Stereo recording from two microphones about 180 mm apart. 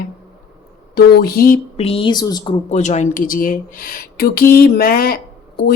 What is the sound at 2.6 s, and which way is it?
Speech, 40° left (ahead or behind).